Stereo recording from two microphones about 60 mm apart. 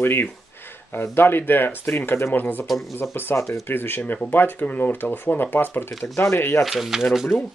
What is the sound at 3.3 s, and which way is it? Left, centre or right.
Speech, left.